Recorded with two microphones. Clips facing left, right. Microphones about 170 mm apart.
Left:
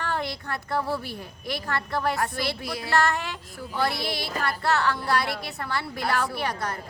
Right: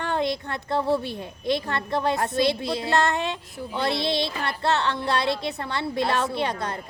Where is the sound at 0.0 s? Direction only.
20° right (ahead or behind).